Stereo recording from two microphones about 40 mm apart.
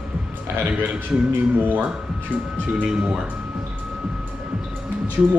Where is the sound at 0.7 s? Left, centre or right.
Right.